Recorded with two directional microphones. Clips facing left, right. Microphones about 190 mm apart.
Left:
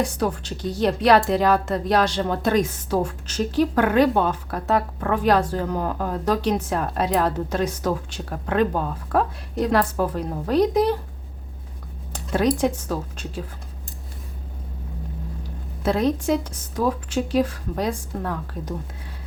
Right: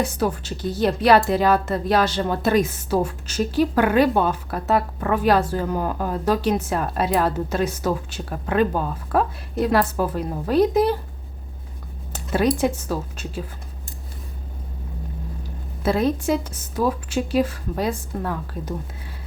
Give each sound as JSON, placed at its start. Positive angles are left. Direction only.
{"t": 0.0, "sound": "a woman's voice", "side_deg": -5}
{"t": 12.1, "sound": "speech", "side_deg": -5}
{"t": 15.8, "sound": "a woman's voice", "side_deg": -5}